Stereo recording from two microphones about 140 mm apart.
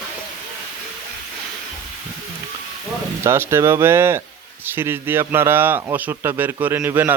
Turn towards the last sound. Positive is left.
turn(degrees=-15)  # may be behind; listen again after turning